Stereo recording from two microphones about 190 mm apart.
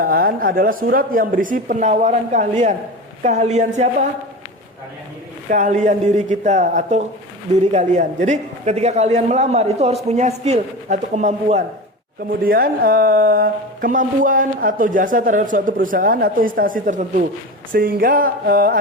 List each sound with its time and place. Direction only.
0.0 s a man's voice: 50° right (ahead or behind)
5.5 s a man's voice: 40° right (ahead or behind)
12.4 s speech: 50° right (ahead or behind)